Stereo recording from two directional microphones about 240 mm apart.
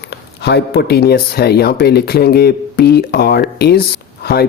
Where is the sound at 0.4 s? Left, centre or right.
Left.